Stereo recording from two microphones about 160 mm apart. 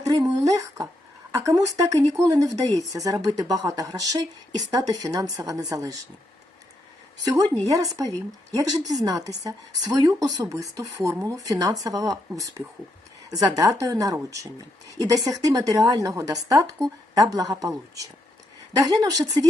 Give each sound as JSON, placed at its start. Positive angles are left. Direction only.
{"t": 0.0, "sound": "speech", "side_deg": -20}
{"t": 7.7, "sound": "speech", "side_deg": -20}